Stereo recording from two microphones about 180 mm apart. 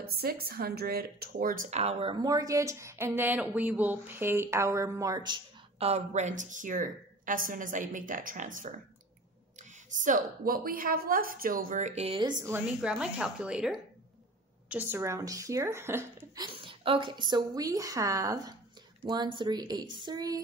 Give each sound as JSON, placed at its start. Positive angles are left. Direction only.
{"t": 0.0, "sound": "speech", "side_deg": -60}
{"t": 16.4, "sound": "a woman's voice", "side_deg": -30}